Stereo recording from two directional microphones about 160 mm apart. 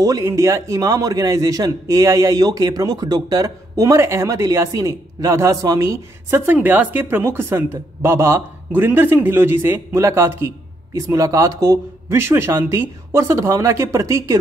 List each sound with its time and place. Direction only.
0.0 s a man's voice: 20° right (ahead or behind)